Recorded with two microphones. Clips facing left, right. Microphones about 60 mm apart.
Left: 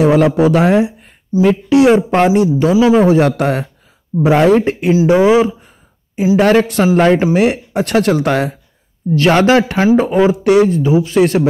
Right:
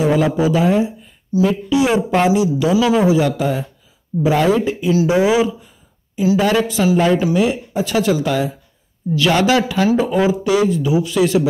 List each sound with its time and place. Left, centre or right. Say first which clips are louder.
0.0 s a woman's voice: left 5 dB; left
2.7 s a man's voice: left 5 dB; left
3.0 s speech: left 4 dB; left
5.0 s speech: left 5 dB; left
6.3 s a woman's voice: left 6 dB; left
9.1 s a woman's voice: left 4 dB; left
10.4 s a woman's voice: left 5 dB; left
10.8 s speech: left 4 dB; left